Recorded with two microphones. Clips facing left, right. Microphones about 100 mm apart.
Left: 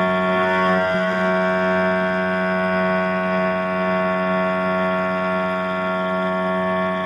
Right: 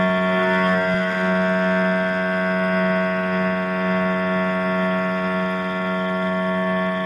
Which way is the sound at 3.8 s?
15° left (ahead or behind).